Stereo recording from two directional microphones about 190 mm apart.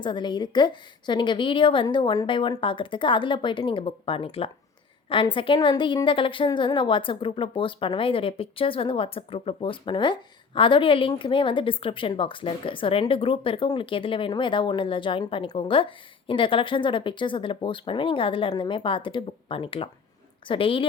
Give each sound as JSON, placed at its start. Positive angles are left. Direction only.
{"t": 0.0, "sound": "a woman's voice", "side_deg": 25}